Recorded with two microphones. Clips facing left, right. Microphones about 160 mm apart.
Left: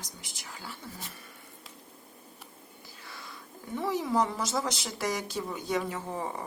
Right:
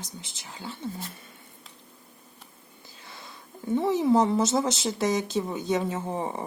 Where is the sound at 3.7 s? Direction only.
25° right (ahead or behind).